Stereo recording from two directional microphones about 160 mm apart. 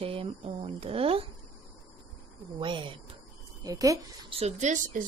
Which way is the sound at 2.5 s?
30° right (ahead or behind).